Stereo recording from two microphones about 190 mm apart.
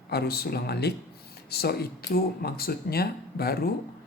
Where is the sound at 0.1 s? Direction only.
55° left (ahead or behind).